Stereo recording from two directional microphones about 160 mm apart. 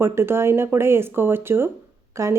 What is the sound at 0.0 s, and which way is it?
A woman's voice, 15° right (ahead or behind).